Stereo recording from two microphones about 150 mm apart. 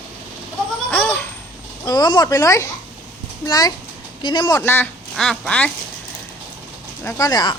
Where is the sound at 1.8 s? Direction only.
25° left (ahead or behind).